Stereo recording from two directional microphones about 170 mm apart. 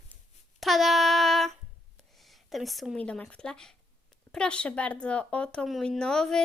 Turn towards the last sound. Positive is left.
turn(degrees=5)  # may be behind; listen again after turning